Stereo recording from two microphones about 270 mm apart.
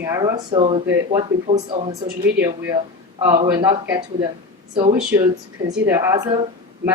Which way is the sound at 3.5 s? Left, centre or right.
Centre.